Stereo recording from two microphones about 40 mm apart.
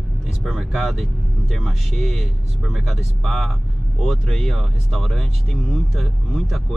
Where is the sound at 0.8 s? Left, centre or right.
Centre.